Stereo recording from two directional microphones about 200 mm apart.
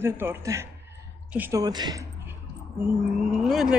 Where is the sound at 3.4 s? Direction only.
Centre (ahead or behind).